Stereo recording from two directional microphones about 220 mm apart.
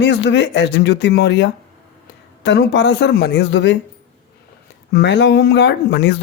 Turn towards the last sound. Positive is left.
turn(degrees=50)  # may be behind; listen again after turning